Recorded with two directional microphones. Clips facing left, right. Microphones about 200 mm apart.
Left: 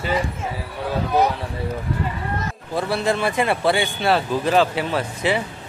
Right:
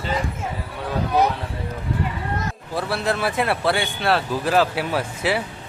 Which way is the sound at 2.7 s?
Centre (ahead or behind).